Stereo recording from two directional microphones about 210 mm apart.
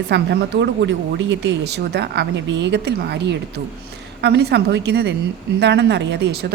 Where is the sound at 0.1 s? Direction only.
55° right (ahead or behind).